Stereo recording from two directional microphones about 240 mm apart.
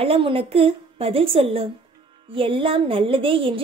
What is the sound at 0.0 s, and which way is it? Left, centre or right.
Child singing, right.